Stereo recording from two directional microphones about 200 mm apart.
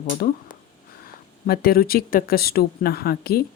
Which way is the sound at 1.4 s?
50° left (ahead or behind).